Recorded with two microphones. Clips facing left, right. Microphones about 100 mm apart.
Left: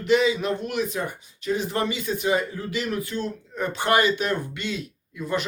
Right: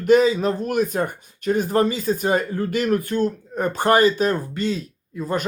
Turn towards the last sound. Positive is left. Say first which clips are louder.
# right 3 dB
turn(degrees=-40)  # may be behind; listen again after turning